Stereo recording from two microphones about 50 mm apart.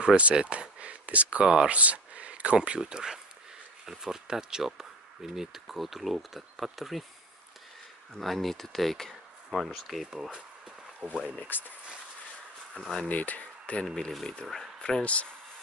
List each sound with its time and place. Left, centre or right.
0.0 s speech: right
1.5 s speech: centre
1.8 s speech: right; by 7.1 s centre
8.1 s speech: centre
11.0 s speech: right
11.3 s speech: left
12.8 s speech: left
13.8 s speech: centre